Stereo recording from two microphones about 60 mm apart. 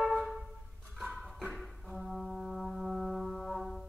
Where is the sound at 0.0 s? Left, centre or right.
Centre.